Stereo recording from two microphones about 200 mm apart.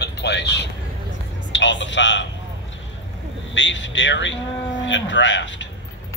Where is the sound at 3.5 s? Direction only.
65° left (ahead or behind).